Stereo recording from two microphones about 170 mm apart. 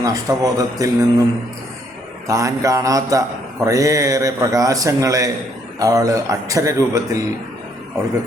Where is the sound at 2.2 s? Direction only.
20° right (ahead or behind).